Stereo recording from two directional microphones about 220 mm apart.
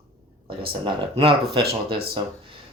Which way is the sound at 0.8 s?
25° right (ahead or behind).